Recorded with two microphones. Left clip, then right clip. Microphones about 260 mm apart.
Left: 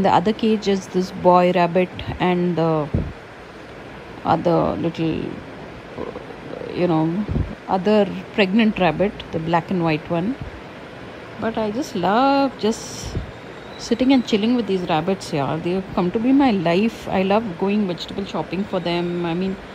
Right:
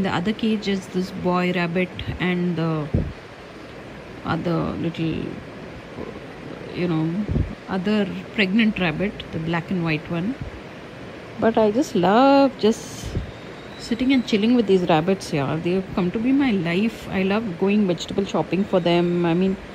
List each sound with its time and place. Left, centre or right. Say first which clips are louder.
0.0 s speech: left 7 dB; centre
0.9 s speech: left 8 dB; left
1.3 s speech: left 8 dB; centre
4.3 s speech: left 7 dB; centre
6.7 s speech: left 5 dB; centre
11.4 s a woman's voice: right 5 dB; centre
13.8 s speech: left 4 dB; centre